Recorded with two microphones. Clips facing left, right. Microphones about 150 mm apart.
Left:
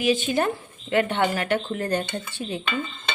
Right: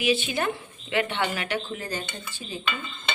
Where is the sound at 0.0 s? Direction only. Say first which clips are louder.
Left 3 dB; 45° left (ahead or behind); by 2.6 s 65° left (ahead or behind).